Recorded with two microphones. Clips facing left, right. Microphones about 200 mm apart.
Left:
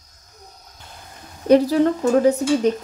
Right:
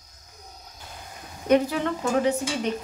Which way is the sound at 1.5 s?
35° left (ahead or behind).